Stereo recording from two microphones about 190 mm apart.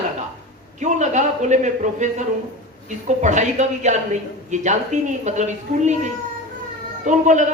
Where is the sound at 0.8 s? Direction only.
40° right (ahead or behind).